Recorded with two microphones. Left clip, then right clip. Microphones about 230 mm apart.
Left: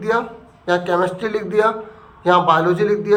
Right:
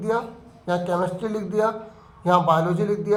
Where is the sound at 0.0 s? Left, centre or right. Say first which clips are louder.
Left 5 dB; right.